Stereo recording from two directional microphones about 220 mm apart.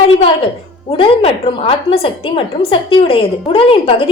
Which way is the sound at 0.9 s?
25° left (ahead or behind).